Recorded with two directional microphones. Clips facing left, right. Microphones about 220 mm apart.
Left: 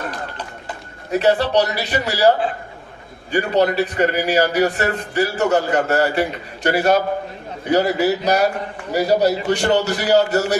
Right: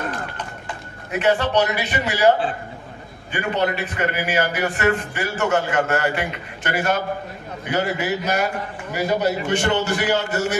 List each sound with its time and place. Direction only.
1.1 s a man's voice: 35° left (ahead or behind)